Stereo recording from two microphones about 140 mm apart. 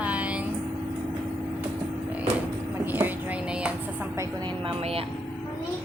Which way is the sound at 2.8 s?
15° right (ahead or behind).